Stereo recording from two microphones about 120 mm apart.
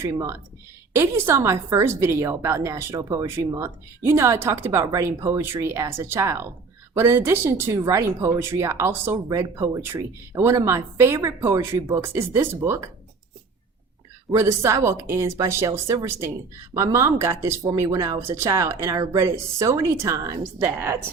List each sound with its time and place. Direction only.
0.0 s a woman's voice: 20° right (ahead or behind)
14.3 s a woman's voice: 25° right (ahead or behind)